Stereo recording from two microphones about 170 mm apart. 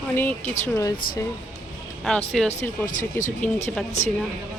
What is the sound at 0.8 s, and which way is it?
Speech, 20° left (ahead or behind).